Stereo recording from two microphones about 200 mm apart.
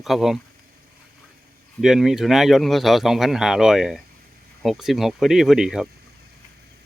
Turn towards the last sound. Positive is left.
turn(degrees=-5)  # may be behind; listen again after turning